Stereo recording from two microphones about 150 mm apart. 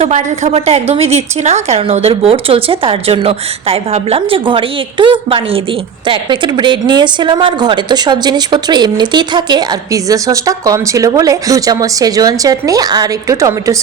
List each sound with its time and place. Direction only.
0.0 s a woman's voice: 50° right (ahead or behind); by 13.7 s 20° right (ahead or behind)